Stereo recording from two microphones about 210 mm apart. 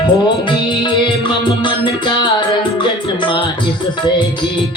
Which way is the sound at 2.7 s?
20° left (ahead or behind).